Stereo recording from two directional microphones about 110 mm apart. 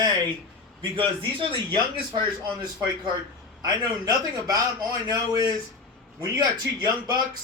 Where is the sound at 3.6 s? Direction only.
35° right (ahead or behind).